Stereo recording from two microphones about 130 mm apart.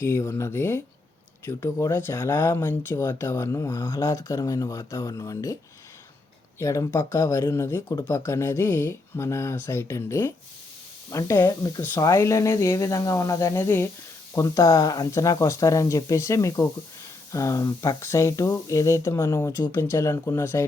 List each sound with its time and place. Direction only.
0.0 s speech: 20° left (ahead or behind)
6.6 s speech: 20° left (ahead or behind)